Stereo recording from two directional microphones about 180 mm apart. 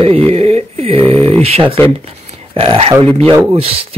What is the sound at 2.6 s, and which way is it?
Speech, 30° right (ahead or behind).